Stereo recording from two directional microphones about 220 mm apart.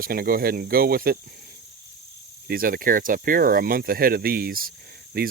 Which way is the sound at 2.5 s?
40° right (ahead or behind).